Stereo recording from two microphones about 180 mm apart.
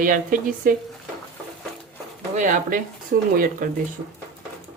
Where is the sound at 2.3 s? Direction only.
45° right (ahead or behind).